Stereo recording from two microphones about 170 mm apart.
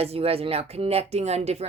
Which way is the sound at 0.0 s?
35° right (ahead or behind).